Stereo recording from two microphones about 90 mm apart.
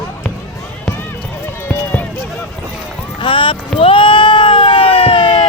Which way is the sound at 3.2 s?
70° left (ahead or behind).